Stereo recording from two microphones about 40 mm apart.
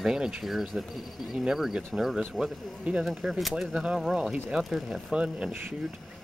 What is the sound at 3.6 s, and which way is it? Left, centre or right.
Speech, centre.